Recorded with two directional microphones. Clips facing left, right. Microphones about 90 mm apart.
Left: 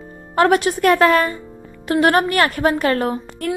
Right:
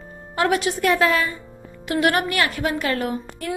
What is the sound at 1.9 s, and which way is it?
A woman's voice, 40° left (ahead or behind).